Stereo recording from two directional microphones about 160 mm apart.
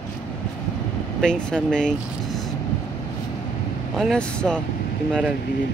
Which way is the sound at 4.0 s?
5° left (ahead or behind).